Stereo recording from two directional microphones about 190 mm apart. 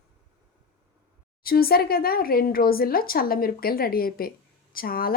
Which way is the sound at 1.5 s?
50° left (ahead or behind).